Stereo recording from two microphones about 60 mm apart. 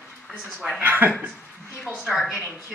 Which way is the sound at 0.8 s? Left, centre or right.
Right.